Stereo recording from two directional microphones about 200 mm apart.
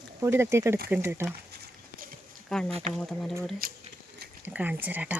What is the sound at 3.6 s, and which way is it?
Speech, 50° right (ahead or behind).